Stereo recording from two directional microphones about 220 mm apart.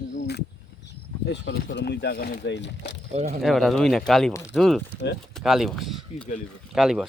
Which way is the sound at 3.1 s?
30° right (ahead or behind).